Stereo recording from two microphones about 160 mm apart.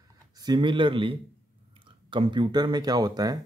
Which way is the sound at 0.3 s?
25° right (ahead or behind).